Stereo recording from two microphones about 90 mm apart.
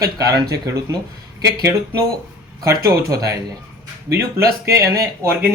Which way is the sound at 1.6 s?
25° right (ahead or behind).